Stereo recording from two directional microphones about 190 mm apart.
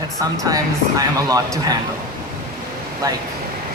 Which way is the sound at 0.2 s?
20° right (ahead or behind).